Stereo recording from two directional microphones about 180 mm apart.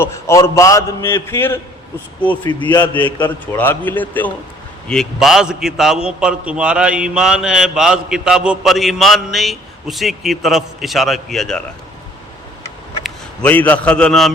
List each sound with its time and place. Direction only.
0.0 s a man's voice: 15° left (ahead or behind)
2.4 s a man's voice: 25° left (ahead or behind)
2.6 s a man's voice: 10° left (ahead or behind)
13.0 s a man's voice: 10° left (ahead or behind)